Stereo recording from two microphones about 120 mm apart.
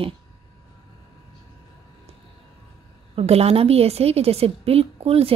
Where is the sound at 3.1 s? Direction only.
60° right (ahead or behind).